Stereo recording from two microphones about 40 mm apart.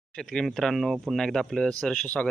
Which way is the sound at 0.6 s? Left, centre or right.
Centre.